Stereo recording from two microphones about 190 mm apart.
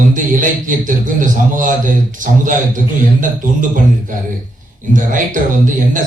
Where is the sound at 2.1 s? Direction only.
45° right (ahead or behind).